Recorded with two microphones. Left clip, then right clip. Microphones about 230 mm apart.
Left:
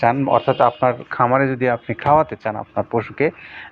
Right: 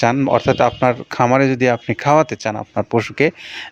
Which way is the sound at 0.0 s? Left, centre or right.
Right.